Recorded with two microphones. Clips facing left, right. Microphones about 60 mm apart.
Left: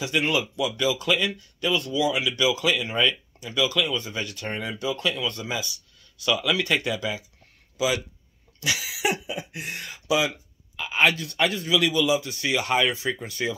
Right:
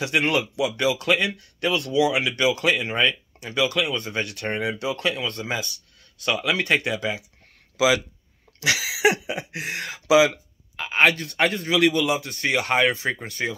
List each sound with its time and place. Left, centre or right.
0.0 s a man's voice: right
5.0 s speech: right
7.7 s speech: right
8.5 s cough: right
9.3 s speech: right
10.8 s a man's voice: right
13.4 s speech: right